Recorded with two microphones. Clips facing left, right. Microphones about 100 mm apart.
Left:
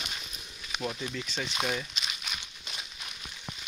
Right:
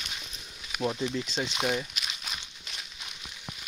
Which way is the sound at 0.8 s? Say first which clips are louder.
Right 6 dB; 20° right (ahead or behind).